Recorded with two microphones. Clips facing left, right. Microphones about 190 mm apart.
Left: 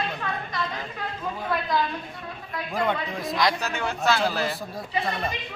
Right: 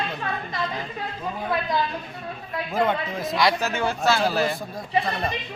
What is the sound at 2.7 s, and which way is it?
Speech, centre (ahead or behind).